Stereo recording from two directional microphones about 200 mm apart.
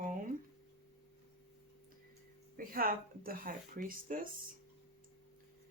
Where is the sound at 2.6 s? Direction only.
45° right (ahead or behind).